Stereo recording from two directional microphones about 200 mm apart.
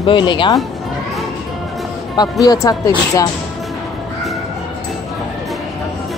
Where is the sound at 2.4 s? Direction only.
20° left (ahead or behind).